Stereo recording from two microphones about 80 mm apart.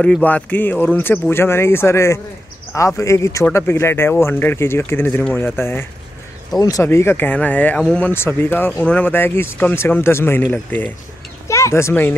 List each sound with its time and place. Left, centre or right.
0.2 s speech: left
6.6 s speech: left; by 7.8 s centre
7.8 s speech: centre
8.1 s speech: left
11.4 s speech: left